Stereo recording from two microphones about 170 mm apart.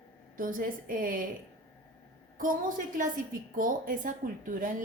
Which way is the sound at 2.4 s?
50° right (ahead or behind).